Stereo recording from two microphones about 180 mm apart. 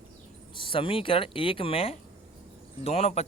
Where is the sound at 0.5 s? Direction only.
30° left (ahead or behind).